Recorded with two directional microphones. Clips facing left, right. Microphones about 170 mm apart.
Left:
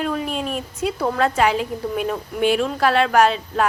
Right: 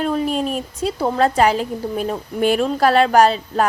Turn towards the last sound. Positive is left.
turn(degrees=-35)  # may be behind; listen again after turning